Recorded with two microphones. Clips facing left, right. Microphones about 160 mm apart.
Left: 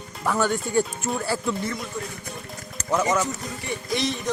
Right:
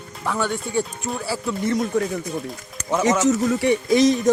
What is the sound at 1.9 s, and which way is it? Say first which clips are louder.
Speech: right 11 dB; 70° right (ahead or behind).